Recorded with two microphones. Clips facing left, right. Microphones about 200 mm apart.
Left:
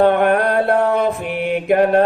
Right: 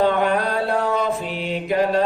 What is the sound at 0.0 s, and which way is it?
Mantra, 60° left (ahead or behind).